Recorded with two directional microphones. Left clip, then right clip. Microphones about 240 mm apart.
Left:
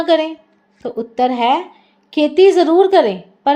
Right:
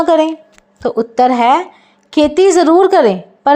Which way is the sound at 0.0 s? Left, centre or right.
Right.